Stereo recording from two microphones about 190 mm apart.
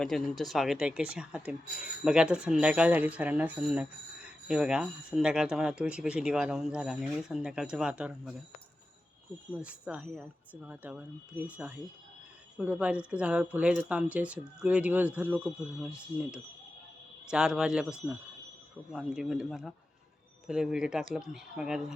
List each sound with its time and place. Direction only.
0.0 s speech: centre (ahead or behind)
9.6 s speech: 5° right (ahead or behind)